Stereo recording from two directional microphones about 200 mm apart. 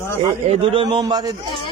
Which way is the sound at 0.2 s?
25° right (ahead or behind).